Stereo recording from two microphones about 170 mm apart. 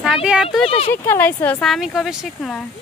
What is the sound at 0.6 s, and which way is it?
Speech, 35° left (ahead or behind).